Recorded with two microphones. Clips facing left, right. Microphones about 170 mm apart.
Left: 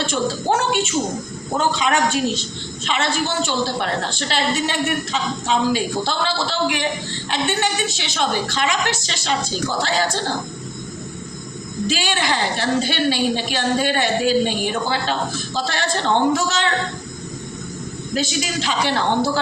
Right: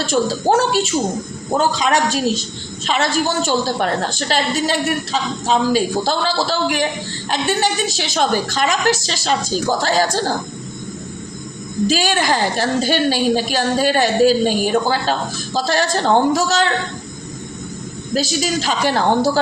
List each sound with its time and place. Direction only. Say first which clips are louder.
0.0 s a woman's voice: right 4 dB; 40° right (ahead or behind)
11.9 s a woman's voice: right 4 dB; 40° right (ahead or behind)
18.1 s a woman's voice: right 4 dB; 40° right (ahead or behind)